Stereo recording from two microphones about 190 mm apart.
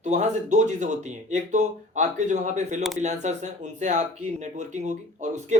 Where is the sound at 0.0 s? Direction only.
40° right (ahead or behind).